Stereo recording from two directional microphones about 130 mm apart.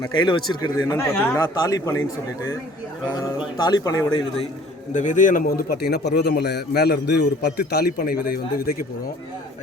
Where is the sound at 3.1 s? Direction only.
30° left (ahead or behind).